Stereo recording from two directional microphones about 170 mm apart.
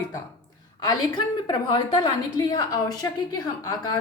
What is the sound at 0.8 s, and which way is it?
A woman's voice, 25° left (ahead or behind).